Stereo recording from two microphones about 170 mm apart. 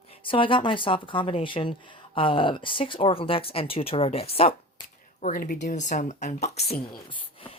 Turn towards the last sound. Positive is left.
turn(degrees=30)  # may be behind; listen again after turning